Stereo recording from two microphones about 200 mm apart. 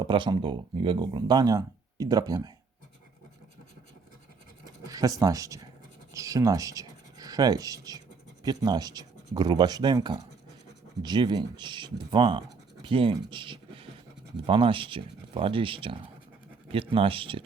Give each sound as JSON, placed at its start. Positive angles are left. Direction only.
{"t": 0.0, "sound": "speech", "side_deg": -25}
{"t": 4.8, "sound": "speech", "side_deg": -15}